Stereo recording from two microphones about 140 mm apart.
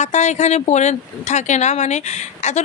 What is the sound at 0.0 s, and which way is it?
A woman's voice, 55° left (ahead or behind).